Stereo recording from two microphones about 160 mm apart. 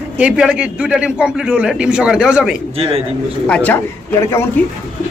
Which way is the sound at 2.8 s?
35° right (ahead or behind).